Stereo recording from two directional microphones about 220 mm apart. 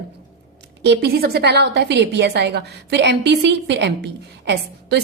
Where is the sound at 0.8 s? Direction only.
50° right (ahead or behind).